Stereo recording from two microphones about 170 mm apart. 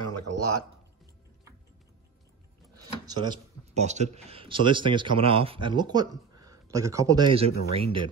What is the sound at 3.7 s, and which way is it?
Speech, 40° right (ahead or behind).